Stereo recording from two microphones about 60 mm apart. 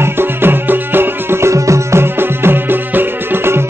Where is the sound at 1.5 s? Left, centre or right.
Right.